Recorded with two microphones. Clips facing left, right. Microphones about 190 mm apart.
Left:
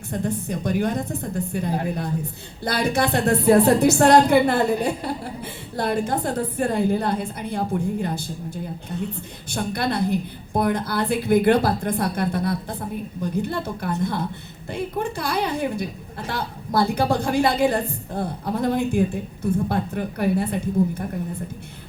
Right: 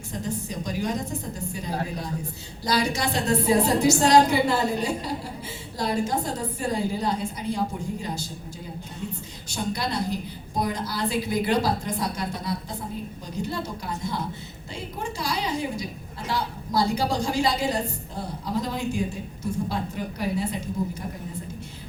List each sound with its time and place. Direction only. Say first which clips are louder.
0.1 s a woman's voice: left 5 dB; 60° left (ahead or behind)